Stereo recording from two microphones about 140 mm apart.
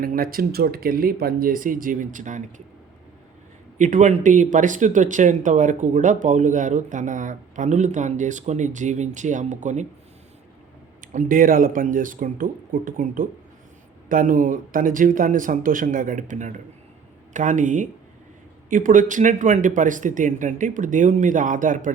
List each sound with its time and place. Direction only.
0.0 s speech: 90° right; by 2.4 s 65° right (ahead or behind)
3.8 s speech: 60° right (ahead or behind)
11.1 s speech: 65° right (ahead or behind)